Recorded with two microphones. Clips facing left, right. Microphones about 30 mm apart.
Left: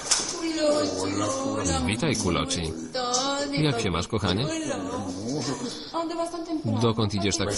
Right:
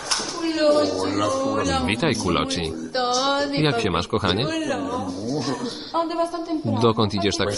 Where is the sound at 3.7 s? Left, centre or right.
Right.